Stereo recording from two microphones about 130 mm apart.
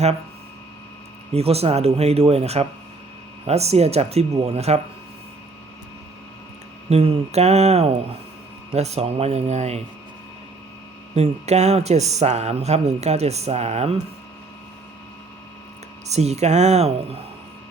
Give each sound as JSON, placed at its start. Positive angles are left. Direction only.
{"t": 1.3, "sound": "speech", "side_deg": -50}
{"t": 6.9, "sound": "speech", "side_deg": -50}
{"t": 11.1, "sound": "speech", "side_deg": -55}
{"t": 16.0, "sound": "speech", "side_deg": -55}